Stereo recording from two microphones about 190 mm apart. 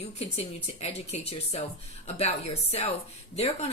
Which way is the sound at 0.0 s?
35° left (ahead or behind).